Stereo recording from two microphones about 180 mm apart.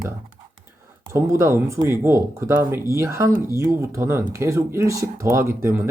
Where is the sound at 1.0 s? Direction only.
15° right (ahead or behind).